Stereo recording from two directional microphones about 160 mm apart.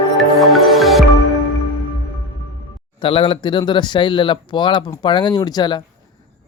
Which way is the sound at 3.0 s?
35° left (ahead or behind).